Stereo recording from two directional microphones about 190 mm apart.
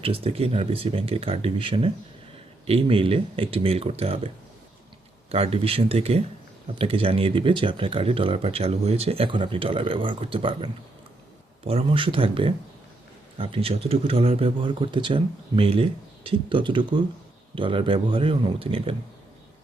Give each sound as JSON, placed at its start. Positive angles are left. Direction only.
{"t": 0.0, "sound": "speech", "side_deg": -30}
{"t": 5.3, "sound": "speech", "side_deg": -30}